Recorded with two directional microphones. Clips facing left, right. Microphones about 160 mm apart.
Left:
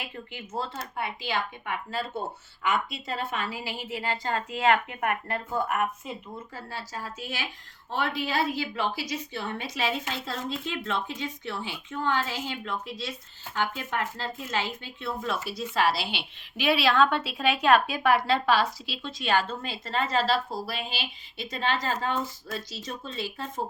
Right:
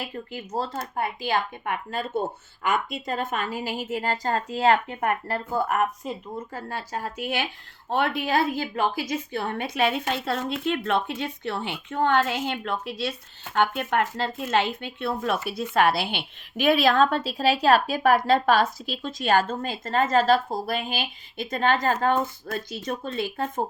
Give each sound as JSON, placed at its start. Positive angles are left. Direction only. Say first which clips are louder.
{"t": 0.0, "sound": "a woman's voice", "louder": "right 5 dB", "side_deg": -40}